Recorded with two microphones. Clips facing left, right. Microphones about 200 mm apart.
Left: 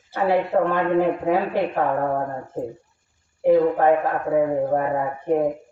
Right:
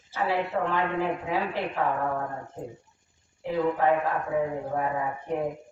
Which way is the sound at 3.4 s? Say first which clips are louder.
Left 9 dB; 50° left (ahead or behind).